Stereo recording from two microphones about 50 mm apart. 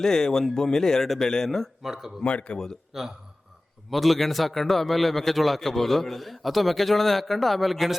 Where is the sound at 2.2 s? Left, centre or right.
Left.